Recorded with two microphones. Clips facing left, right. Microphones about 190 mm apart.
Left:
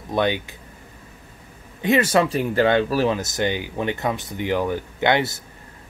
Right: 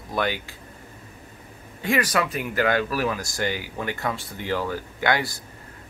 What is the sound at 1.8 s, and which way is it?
Speech, 25° left (ahead or behind).